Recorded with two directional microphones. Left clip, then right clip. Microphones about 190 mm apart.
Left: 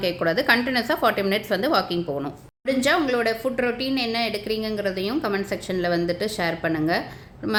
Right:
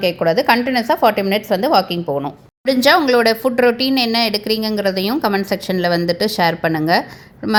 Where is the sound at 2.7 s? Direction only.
45° right (ahead or behind).